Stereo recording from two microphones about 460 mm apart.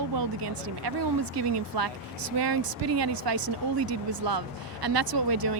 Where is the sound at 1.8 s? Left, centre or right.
Right.